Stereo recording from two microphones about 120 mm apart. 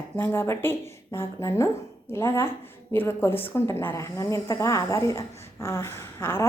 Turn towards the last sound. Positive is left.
turn(degrees=20)  # may be behind; listen again after turning